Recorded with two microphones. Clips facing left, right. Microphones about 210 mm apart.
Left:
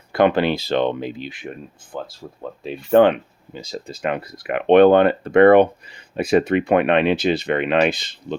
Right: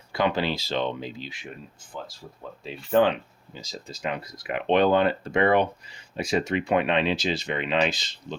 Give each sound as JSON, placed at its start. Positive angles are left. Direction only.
{"t": 0.1, "sound": "speech", "side_deg": 55}